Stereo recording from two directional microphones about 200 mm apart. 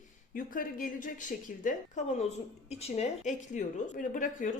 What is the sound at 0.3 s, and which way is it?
A woman's voice, 45° left (ahead or behind).